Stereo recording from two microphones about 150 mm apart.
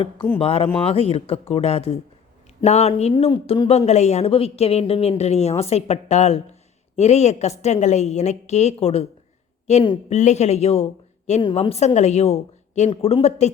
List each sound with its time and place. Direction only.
0.3 s a woman's voice: 40° left (ahead or behind)
3.1 s a woman's voice: 35° left (ahead or behind)
12.9 s speech: 35° left (ahead or behind)